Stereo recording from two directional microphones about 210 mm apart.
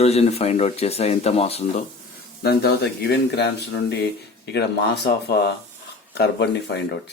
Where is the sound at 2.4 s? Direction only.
50° left (ahead or behind).